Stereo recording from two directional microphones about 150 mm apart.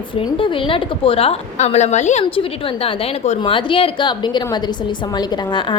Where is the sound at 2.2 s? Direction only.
35° left (ahead or behind).